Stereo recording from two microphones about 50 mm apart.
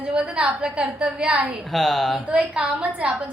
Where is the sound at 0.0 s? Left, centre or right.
Right.